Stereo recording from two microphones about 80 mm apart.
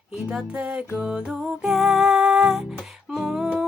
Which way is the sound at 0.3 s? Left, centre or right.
Centre.